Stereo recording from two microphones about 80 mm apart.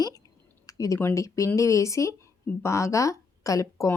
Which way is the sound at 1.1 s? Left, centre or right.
Left.